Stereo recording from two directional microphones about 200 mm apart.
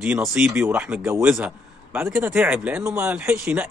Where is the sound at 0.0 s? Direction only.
10° right (ahead or behind).